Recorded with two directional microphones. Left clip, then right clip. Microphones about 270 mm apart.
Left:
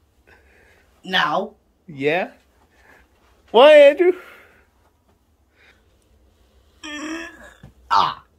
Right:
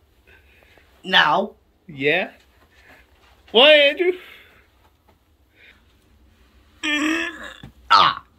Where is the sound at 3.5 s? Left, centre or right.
Centre.